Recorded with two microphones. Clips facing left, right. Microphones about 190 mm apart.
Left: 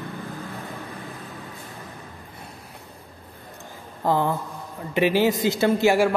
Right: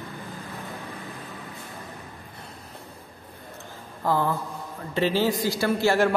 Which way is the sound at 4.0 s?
20° left (ahead or behind).